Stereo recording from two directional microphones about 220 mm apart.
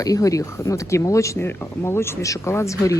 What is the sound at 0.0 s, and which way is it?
Speech, 15° left (ahead or behind).